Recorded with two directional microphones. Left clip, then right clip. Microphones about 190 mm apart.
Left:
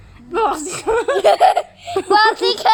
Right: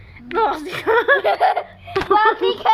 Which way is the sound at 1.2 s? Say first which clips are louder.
Left 5 dB; 55° left (ahead or behind).